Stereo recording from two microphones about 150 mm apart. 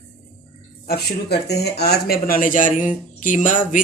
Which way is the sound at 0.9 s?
90° left.